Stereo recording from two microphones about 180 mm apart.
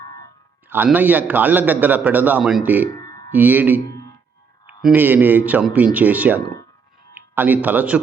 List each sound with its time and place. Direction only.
0.7 s a man's voice: 10° right (ahead or behind)
3.0 s a sound: 20° left (ahead or behind)
3.3 s a man's voice: 10° right (ahead or behind)
4.8 s a man's voice: 10° right (ahead or behind)